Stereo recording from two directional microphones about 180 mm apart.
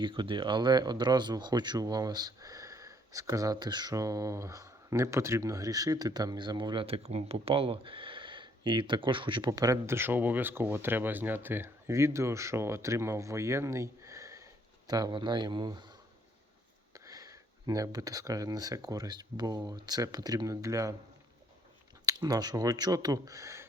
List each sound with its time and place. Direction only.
0.0 s speech: 25° right (ahead or behind)
22.0 s speech: 20° right (ahead or behind)